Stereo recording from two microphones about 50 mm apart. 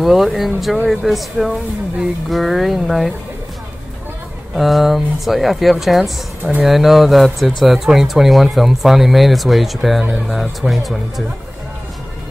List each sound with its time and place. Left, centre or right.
0.0 s speech: centre
4.6 s speech: centre